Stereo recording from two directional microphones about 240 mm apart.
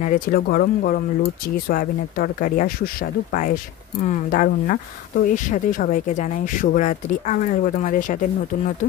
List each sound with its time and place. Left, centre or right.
0.0 s speech: left